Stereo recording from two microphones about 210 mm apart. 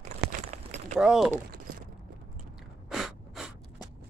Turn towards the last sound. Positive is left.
turn(degrees=0)  # may be behind; listen again after turning